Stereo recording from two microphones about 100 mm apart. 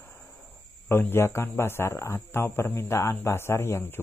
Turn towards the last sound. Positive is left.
turn(degrees=25)  # may be behind; listen again after turning